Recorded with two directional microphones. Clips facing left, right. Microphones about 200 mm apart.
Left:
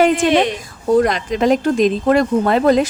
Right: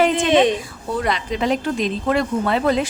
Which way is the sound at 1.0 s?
45° left (ahead or behind).